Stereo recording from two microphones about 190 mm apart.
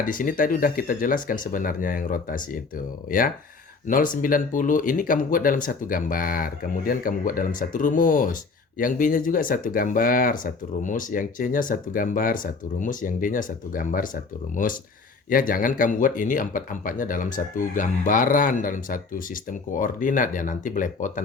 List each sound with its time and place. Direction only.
0.0 s speech: 45° left (ahead or behind)